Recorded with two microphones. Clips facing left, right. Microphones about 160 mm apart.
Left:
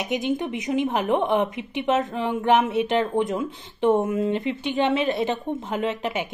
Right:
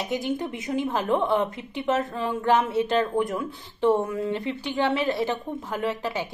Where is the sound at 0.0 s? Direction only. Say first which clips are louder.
Left 2 dB; 20° left (ahead or behind).